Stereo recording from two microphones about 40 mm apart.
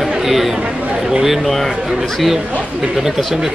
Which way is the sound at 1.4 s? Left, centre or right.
Centre.